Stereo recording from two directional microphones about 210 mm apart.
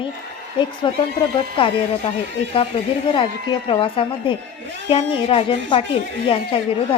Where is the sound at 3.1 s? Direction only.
25° left (ahead or behind).